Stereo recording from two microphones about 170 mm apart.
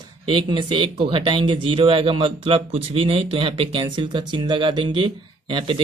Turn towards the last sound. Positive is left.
turn(degrees=-30)  # may be behind; listen again after turning